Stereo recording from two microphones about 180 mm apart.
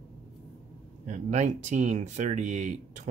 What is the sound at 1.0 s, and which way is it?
Speech, 40° right (ahead or behind).